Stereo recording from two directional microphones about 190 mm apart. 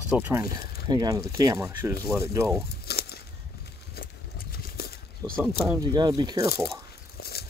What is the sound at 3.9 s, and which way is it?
Horse, 50° left (ahead or behind).